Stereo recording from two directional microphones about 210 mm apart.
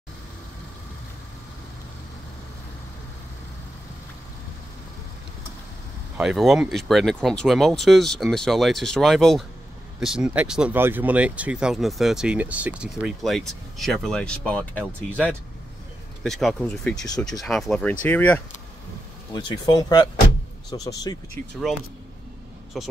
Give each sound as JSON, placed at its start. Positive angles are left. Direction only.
{"t": 6.1, "sound": "speech", "side_deg": 0}
{"t": 19.3, "sound": "speech", "side_deg": 20}
{"t": 22.7, "sound": "speech", "side_deg": 0}